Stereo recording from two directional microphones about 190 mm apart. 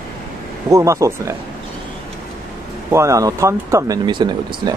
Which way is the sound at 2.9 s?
15° right (ahead or behind).